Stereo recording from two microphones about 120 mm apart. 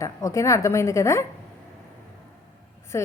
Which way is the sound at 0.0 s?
25° left (ahead or behind).